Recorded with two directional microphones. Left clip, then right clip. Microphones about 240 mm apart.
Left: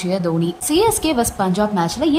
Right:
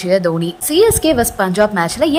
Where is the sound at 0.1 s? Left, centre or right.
Centre.